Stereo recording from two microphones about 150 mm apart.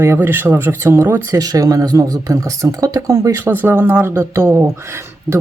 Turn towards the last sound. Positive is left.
turn(degrees=-20)  # may be behind; listen again after turning